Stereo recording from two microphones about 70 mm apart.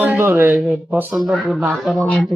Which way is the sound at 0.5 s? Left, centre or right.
Centre.